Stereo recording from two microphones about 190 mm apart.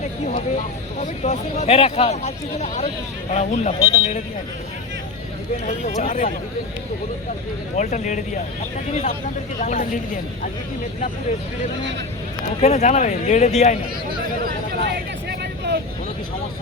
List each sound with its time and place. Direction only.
1.2 s speech: 35° left (ahead or behind)
5.6 s speech: 35° left (ahead or behind)
7.8 s speech: 40° left (ahead or behind)
12.6 s speech: 35° left (ahead or behind)
14.8 s music: 60° right (ahead or behind)